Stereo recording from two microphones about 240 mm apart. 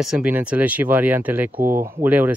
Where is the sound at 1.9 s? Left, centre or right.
Centre.